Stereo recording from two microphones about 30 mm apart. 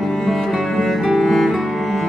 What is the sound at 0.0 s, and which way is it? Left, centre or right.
Music, centre.